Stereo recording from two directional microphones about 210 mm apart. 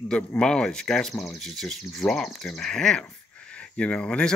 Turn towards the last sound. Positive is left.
turn(degrees=5)  # may be behind; listen again after turning